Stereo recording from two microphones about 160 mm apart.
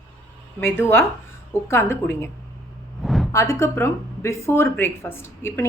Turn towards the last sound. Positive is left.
turn(degrees=15)  # may be behind; listen again after turning